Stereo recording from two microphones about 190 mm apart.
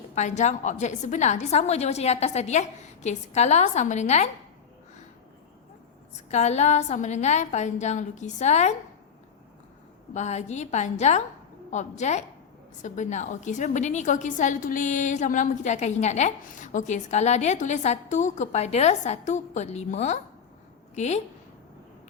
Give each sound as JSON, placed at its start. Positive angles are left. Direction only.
{"t": 0.1, "sound": "a woman's voice", "side_deg": 40}
{"t": 6.3, "sound": "a woman's voice", "side_deg": 35}
{"t": 10.2, "sound": "a woman's voice", "side_deg": 35}